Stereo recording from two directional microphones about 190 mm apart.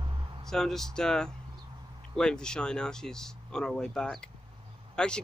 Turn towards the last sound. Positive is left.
turn(degrees=5)  # may be behind; listen again after turning